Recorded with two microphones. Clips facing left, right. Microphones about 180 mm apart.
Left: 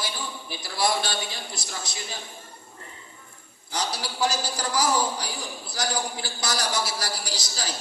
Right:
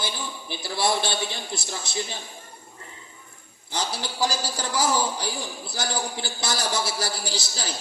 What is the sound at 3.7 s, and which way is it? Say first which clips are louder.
A man's voice: even; 25° right (ahead or behind).